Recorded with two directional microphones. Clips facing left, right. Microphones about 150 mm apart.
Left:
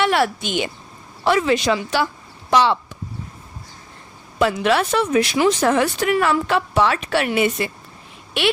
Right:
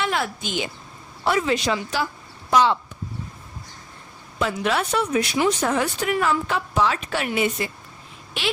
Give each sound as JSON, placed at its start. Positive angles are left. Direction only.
{"t": 0.0, "sound": "a woman's voice", "side_deg": 70}
{"t": 1.2, "sound": "speech", "side_deg": 90}
{"t": 4.4, "sound": "speech", "side_deg": 75}